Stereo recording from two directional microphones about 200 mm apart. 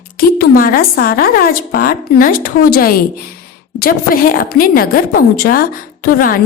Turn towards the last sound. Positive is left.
turn(degrees=45)  # may be behind; listen again after turning